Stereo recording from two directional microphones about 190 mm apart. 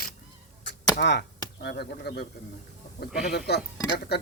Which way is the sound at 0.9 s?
65° left (ahead or behind).